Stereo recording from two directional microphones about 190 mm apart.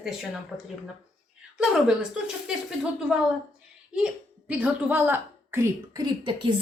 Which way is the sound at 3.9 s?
5° right (ahead or behind).